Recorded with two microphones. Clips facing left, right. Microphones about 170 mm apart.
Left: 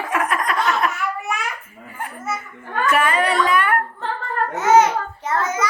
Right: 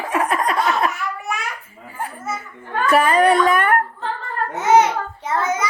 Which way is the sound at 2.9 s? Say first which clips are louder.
Right 5 dB; 40° right (ahead or behind).